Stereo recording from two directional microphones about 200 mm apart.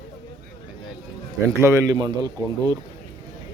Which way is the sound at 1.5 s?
15° right (ahead or behind).